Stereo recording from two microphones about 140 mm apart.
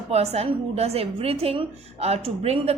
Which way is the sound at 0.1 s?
50° right (ahead or behind).